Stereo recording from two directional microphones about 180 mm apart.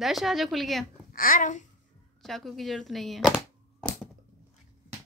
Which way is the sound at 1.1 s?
50° left (ahead or behind).